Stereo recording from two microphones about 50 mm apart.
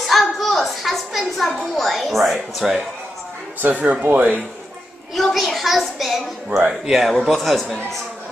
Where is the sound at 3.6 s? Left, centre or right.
Right.